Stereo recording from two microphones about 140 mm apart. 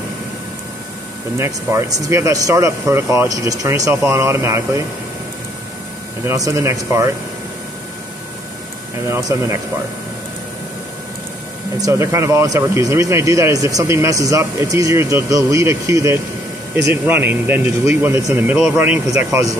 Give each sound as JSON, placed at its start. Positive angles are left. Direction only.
{"t": 1.4, "sound": "speech", "side_deg": -20}
{"t": 6.2, "sound": "speech", "side_deg": -25}
{"t": 9.1, "sound": "speech", "side_deg": -20}
{"t": 11.8, "sound": "speech", "side_deg": -20}